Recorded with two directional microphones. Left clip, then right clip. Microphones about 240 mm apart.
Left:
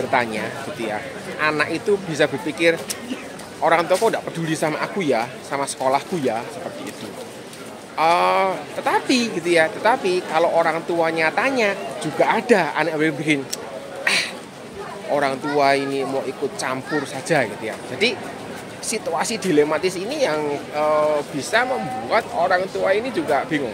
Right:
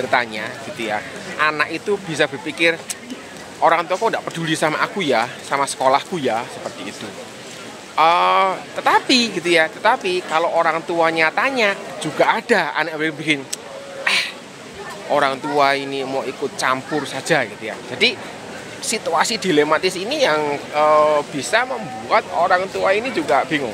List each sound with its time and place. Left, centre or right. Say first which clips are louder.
0.1 s speech: right 1 dB; centre
7.9 s speech: right 3 dB; centre
14.0 s a sound: right 2 dB; centre
15.1 s speech: right 3 dB; centre